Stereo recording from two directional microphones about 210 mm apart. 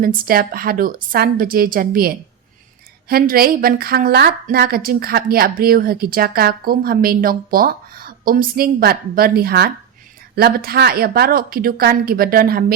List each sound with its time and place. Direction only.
0.0 s a woman's voice: 40° right (ahead or behind)